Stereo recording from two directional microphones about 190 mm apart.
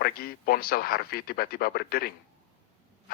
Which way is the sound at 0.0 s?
50° left (ahead or behind).